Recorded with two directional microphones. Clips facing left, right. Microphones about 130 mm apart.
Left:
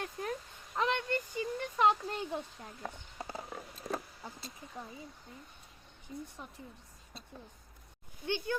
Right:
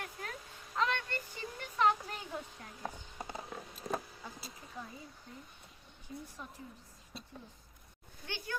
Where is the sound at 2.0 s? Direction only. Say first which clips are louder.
Left 6 dB; 35° left (ahead or behind).